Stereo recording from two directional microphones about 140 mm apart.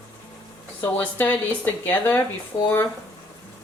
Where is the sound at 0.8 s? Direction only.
15° left (ahead or behind).